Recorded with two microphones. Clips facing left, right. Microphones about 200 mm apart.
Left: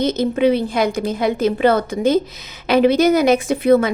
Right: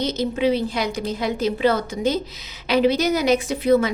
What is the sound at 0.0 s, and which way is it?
A woman's voice, 50° left (ahead or behind).